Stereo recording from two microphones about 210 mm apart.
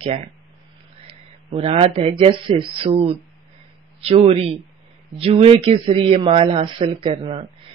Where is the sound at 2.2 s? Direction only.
25° right (ahead or behind).